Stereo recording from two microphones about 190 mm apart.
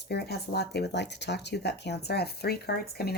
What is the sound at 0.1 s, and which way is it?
Speech, 60° left (ahead or behind).